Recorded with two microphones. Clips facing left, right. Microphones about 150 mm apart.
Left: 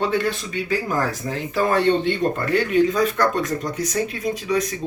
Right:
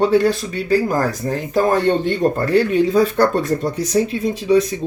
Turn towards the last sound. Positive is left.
turn(degrees=-30)  # may be behind; listen again after turning